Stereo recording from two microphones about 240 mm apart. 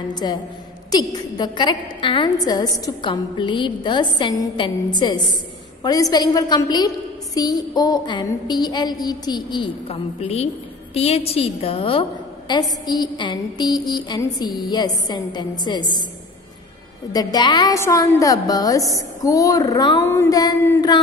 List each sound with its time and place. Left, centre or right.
0.1 s a woman's voice: centre
17.1 s a woman's voice: centre